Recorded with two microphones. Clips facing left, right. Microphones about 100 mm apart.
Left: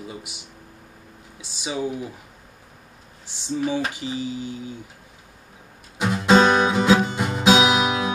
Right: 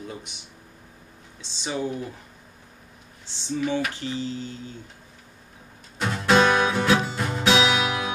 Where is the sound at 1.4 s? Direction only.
10° left (ahead or behind).